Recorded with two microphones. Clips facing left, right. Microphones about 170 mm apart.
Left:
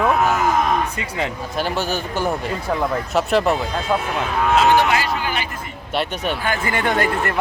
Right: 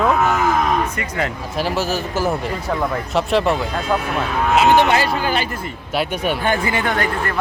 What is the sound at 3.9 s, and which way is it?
Speech, 15° left (ahead or behind).